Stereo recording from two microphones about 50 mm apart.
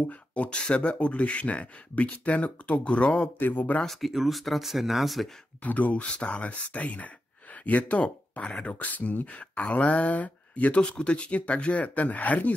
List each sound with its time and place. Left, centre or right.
0.3 s speech: left
3.3 s speech: left
3.8 s speech: centre
5.6 s speech: left
8.7 s speech: left